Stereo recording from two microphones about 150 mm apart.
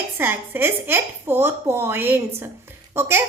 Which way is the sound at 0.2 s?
15° right (ahead or behind).